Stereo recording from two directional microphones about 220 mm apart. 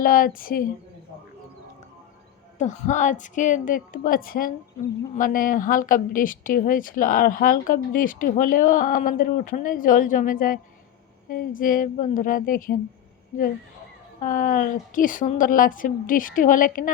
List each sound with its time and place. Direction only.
0.0 s speech: 40° left (ahead or behind)
2.6 s speech: 35° left (ahead or behind)
14.2 s speech: 40° left (ahead or behind)